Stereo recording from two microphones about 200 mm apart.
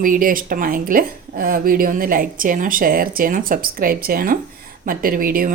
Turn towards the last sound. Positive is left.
turn(degrees=-45)  # may be behind; listen again after turning